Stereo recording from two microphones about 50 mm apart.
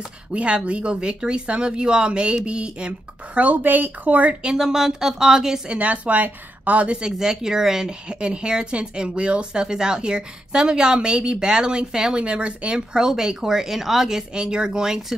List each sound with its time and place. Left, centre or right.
0.3 s speech: right
3.3 s speech: right
4.6 s speech: centre
5.7 s speech: right
7.0 s speech: centre